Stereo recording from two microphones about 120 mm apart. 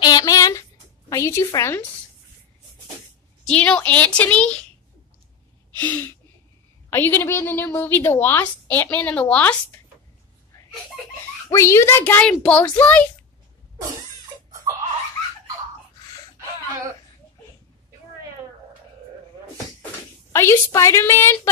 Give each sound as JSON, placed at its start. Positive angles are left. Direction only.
{"t": 0.0, "sound": "a sound", "side_deg": 30}
{"t": 3.5, "sound": "a woman's voice", "side_deg": 10}
{"t": 5.8, "sound": "a woman's voice", "side_deg": 15}
{"t": 11.4, "sound": "a woman's voice", "side_deg": 25}
{"t": 20.3, "sound": "a woman's voice", "side_deg": 25}